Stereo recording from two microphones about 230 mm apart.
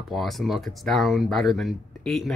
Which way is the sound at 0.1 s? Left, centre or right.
Centre.